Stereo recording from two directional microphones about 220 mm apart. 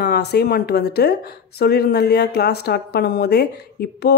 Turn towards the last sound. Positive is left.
turn(degrees=45)  # may be behind; listen again after turning